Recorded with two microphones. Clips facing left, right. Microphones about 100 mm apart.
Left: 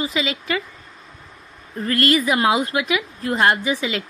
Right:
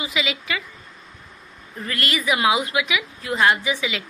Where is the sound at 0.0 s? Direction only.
40° left (ahead or behind).